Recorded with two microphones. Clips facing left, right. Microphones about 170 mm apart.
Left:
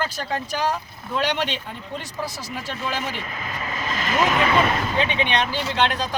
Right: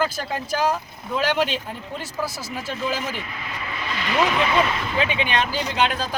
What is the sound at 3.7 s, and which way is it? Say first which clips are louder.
Vehicle: even; 45° left (ahead or behind).